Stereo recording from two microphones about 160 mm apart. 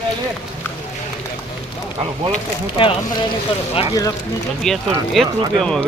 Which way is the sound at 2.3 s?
35° left (ahead or behind).